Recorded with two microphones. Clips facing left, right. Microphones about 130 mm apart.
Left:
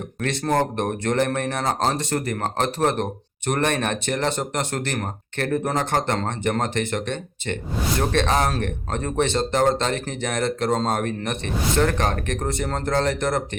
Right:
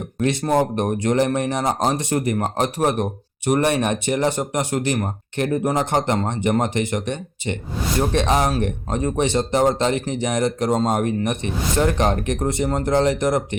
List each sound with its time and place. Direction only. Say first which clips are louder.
0.6 s speech: right 3 dB; 15° right (ahead or behind)